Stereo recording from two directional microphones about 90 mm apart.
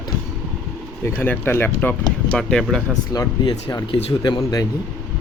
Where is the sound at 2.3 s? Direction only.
5° left (ahead or behind).